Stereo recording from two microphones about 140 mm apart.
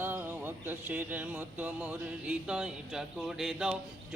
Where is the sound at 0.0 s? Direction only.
15° right (ahead or behind).